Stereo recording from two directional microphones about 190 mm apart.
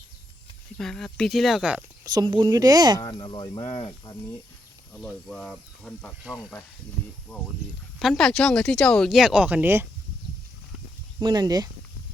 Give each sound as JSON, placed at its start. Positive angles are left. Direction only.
{"t": 0.8, "sound": "speech", "side_deg": 5}
{"t": 2.0, "sound": "speech", "side_deg": -25}
{"t": 3.0, "sound": "speech", "side_deg": 25}
{"t": 4.9, "sound": "speech", "side_deg": 5}
{"t": 7.9, "sound": "speech", "side_deg": 0}
{"t": 11.2, "sound": "speech", "side_deg": -20}